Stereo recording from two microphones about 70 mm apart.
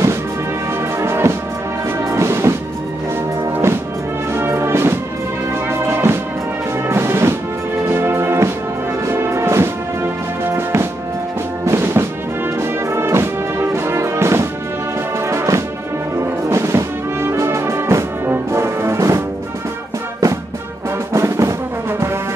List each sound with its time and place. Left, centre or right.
0.9 s music: right
4.3 s music: right
21.1 s music: right